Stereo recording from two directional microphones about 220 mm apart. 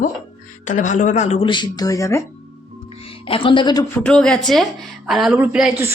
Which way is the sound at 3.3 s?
25° left (ahead or behind).